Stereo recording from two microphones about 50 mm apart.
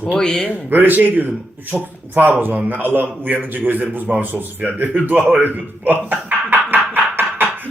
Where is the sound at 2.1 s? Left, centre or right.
Right.